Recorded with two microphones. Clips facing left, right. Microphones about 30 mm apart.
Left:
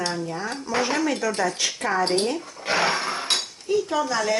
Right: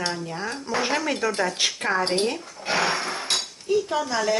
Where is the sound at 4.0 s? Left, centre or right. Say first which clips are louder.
Left 1 dB; centre.